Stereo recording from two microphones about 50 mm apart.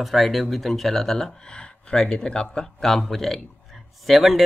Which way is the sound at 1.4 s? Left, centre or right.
Centre.